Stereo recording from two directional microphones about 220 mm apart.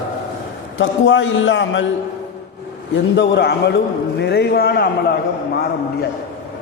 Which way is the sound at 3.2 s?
50° left (ahead or behind).